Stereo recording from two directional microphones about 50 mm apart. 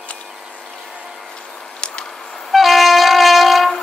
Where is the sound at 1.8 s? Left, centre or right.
Centre.